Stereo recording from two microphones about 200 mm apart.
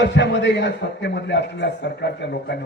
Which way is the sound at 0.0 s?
60° left (ahead or behind).